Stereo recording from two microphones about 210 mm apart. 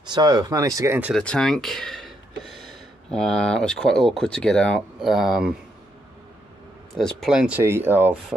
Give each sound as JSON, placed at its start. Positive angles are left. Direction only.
{"t": 0.1, "sound": "speech", "side_deg": -20}
{"t": 1.2, "sound": "speech", "side_deg": 5}
{"t": 7.0, "sound": "speech", "side_deg": 0}